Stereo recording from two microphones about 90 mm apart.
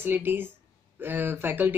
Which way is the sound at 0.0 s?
25° right (ahead or behind).